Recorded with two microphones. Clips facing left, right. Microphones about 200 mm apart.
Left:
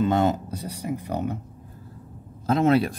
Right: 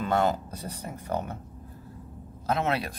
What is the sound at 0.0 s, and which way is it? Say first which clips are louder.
Speech: left 4 dB; 20° left (ahead or behind).